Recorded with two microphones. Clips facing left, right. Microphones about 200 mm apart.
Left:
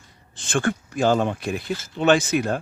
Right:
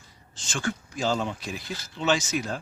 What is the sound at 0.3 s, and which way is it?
Speech, 55° left (ahead or behind).